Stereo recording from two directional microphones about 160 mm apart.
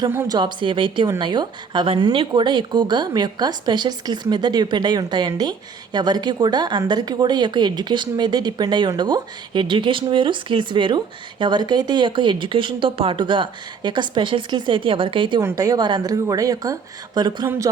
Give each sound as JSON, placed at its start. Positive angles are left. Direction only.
{"t": 0.1, "sound": "speech", "side_deg": -15}
{"t": 0.3, "sound": "speech", "side_deg": -30}
{"t": 15.4, "sound": "speech", "side_deg": -20}